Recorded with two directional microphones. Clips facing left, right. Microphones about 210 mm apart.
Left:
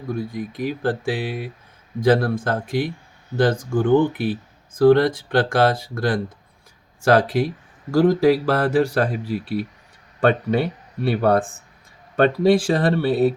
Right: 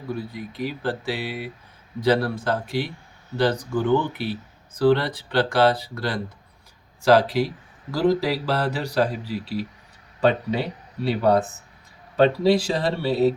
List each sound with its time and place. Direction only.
0.2 s speech: 50° left (ahead or behind)